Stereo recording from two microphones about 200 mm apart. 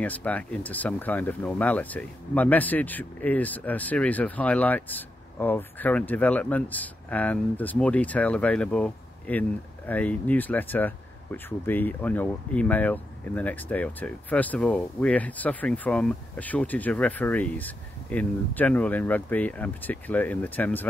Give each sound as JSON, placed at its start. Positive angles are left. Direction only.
{"t": 0.0, "sound": "speech", "side_deg": 5}